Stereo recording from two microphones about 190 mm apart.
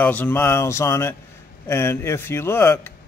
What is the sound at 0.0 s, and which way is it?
Speech, 10° left (ahead or behind).